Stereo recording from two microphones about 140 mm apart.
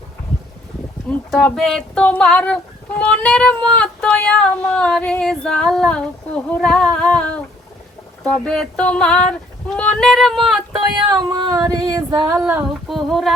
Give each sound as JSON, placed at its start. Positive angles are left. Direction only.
{"t": 1.3, "sound": "child singing", "side_deg": 5}
{"t": 8.2, "sound": "speech", "side_deg": 5}
{"t": 11.1, "sound": "female singing", "side_deg": -30}
{"t": 12.9, "sound": "speech", "side_deg": 0}